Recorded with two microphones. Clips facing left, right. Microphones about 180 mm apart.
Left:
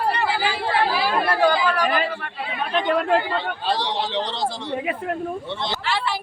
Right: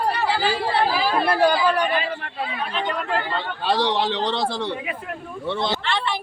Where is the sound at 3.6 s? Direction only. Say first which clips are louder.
Right 7 dB; 65° right (ahead or behind).